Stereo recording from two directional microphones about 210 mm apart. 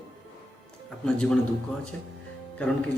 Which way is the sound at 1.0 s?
5° left (ahead or behind).